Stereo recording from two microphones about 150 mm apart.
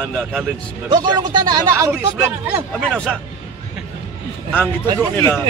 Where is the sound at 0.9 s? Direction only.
30° right (ahead or behind).